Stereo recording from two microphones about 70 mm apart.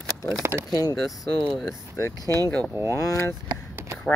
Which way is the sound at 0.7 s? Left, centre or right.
Left.